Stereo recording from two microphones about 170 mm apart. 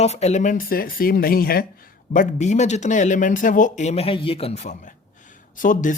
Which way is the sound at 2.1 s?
45° left (ahead or behind).